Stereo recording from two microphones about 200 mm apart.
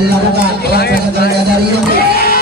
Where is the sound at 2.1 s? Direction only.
50° left (ahead or behind).